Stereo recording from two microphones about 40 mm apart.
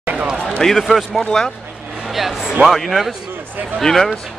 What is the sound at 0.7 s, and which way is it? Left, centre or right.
Speech, centre.